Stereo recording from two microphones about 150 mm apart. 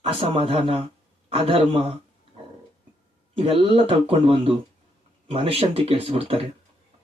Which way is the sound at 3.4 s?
40° right (ahead or behind).